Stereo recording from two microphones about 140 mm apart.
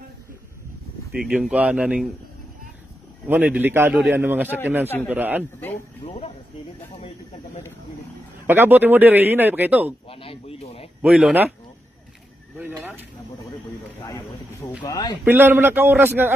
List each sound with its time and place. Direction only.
1.1 s speech: 5° right (ahead or behind)
3.3 s a man's voice: 10° right (ahead or behind)
6.0 s speech: 50° left (ahead or behind)
8.5 s a man's voice: 15° right (ahead or behind)
10.0 s a sound: 40° left (ahead or behind)
11.0 s speech: 5° right (ahead or behind)
12.5 s a sound: 15° right (ahead or behind)
14.0 s a sound: 25° left (ahead or behind)
14.9 s speech: 30° left (ahead or behind)
15.2 s a man's voice: 15° right (ahead or behind)